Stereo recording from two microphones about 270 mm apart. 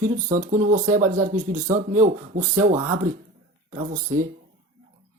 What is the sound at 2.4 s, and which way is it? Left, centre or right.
Speech, centre.